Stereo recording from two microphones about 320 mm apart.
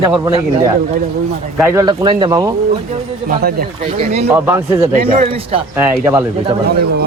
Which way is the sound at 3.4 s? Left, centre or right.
Right.